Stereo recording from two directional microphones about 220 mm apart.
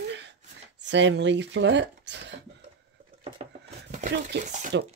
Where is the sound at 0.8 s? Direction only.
55° right (ahead or behind).